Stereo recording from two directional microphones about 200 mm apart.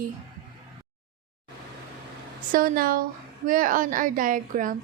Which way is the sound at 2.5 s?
45° right (ahead or behind).